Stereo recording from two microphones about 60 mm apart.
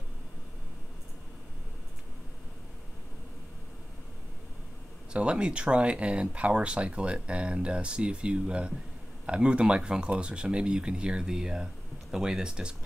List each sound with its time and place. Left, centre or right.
5.1 s speech: centre